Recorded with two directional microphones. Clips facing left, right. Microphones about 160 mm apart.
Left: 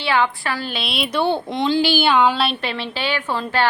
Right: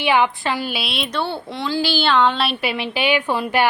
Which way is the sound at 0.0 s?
15° right (ahead or behind).